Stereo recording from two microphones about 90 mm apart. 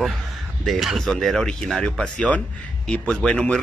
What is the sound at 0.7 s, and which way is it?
Speech, centre (ahead or behind).